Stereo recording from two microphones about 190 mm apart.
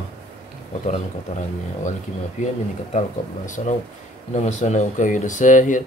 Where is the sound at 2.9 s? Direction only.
40° left (ahead or behind).